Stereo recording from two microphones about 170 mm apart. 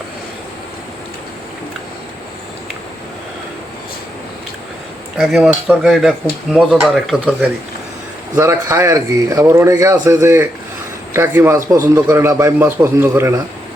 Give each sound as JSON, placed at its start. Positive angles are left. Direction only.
{"t": 5.1, "sound": "speech", "side_deg": 0}
{"t": 8.4, "sound": "a man's voice", "side_deg": -15}